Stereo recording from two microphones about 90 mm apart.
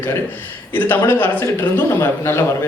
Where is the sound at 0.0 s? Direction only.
25° left (ahead or behind).